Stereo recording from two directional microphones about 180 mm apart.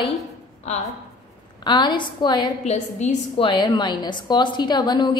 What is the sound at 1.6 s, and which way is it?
Speech, 25° left (ahead or behind).